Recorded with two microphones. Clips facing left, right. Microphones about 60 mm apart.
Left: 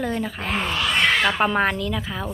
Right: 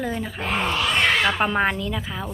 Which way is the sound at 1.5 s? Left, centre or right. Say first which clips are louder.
Left 1 dB; centre.